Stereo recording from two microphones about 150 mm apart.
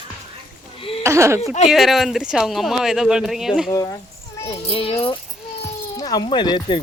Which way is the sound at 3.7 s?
25° left (ahead or behind).